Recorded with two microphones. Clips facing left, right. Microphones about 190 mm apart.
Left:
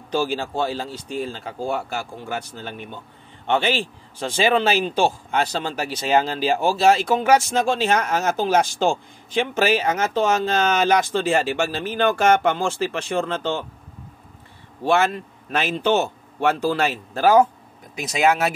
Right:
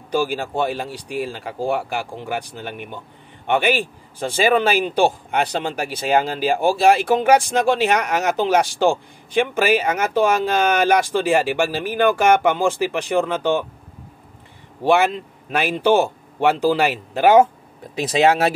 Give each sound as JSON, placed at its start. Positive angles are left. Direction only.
{"t": 0.1, "sound": "speech", "side_deg": -15}
{"t": 14.8, "sound": "speech", "side_deg": -15}